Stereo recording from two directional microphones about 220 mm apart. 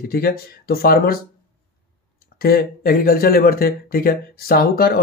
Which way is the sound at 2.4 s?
45° left (ahead or behind).